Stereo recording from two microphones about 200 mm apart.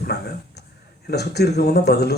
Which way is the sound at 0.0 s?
55° left (ahead or behind).